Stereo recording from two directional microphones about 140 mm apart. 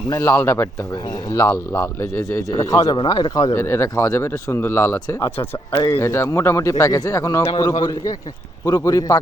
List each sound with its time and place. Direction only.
0.1 s a man's voice: 20° left (ahead or behind)
3.5 s a man's voice: 20° left (ahead or behind)
5.2 s speech: 40° left (ahead or behind)
5.8 s a man's voice: 20° left (ahead or behind)